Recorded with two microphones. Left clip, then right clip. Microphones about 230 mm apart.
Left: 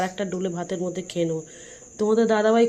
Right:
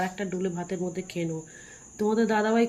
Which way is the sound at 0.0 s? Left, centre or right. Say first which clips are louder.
Left 3 dB; centre.